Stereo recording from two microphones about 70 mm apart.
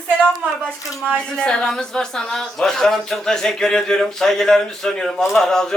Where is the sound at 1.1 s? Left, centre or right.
Centre.